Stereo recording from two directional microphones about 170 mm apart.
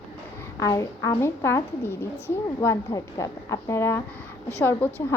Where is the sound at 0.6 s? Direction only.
20° left (ahead or behind).